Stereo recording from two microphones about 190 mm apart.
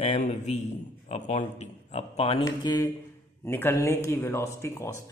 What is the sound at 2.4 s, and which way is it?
Speech, 20° left (ahead or behind).